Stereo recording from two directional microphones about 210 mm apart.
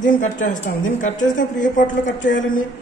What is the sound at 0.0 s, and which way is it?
A woman's voice, 40° left (ahead or behind).